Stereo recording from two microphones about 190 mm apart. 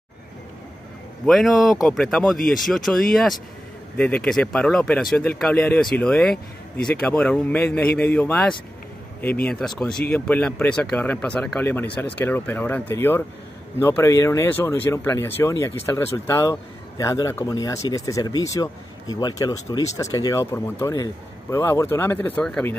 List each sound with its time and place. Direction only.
1.2 s speech: centre (ahead or behind)
2.3 s speech: 45° left (ahead or behind)
2.6 s speech: centre (ahead or behind)